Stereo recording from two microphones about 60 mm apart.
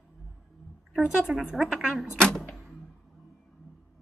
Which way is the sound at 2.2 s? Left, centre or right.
Centre.